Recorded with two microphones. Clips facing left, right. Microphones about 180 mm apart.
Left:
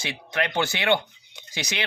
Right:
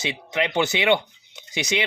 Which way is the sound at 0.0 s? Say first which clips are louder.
Right 3 dB; 20° right (ahead or behind).